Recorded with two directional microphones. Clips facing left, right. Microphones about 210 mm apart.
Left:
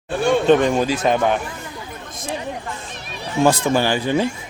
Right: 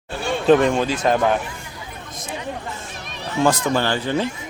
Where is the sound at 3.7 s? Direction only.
10° left (ahead or behind).